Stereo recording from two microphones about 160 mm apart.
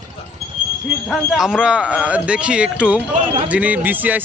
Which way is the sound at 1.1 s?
Centre (ahead or behind).